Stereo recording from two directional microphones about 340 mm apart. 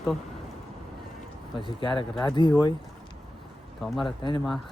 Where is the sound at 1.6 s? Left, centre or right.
Centre.